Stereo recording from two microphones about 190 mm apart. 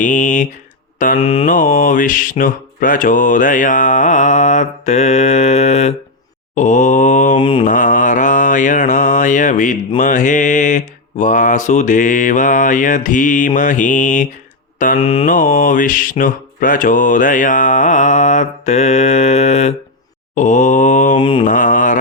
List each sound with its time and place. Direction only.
0.0 s mantra: 40° left (ahead or behind)
0.9 s speech: 45° left (ahead or behind)
1.2 s mantra: 30° left (ahead or behind)
1.5 s mantra: 45° left (ahead or behind)
7.3 s mantra: 25° left (ahead or behind)
7.6 s mantra: 45° left (ahead or behind)
14.9 s mantra: 30° left (ahead or behind)
15.3 s mantra: 45° left (ahead or behind)
21.2 s mantra: 25° left (ahead or behind)
21.4 s mantra: 45° left (ahead or behind)